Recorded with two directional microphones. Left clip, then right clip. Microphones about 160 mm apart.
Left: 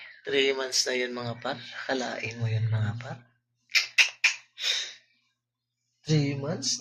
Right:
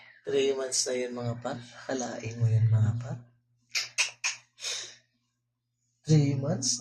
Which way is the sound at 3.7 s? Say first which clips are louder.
Left 7 dB; 5° right (ahead or behind).